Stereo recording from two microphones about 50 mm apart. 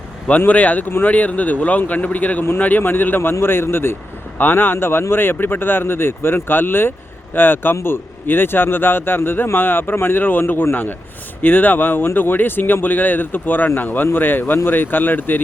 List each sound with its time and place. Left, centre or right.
0.3 s speech: left
3.4 s speech: left
4.4 s speech: left